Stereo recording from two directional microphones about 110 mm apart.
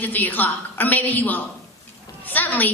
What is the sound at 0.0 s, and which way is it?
A woman's voice, 15° left (ahead or behind).